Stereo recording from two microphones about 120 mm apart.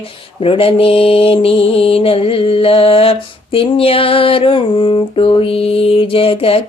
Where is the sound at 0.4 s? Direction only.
50° left (ahead or behind).